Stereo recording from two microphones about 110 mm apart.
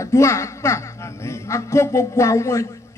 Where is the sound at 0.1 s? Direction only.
25° left (ahead or behind).